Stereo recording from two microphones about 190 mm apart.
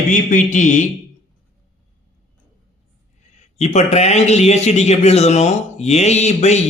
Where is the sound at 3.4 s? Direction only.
35° left (ahead or behind).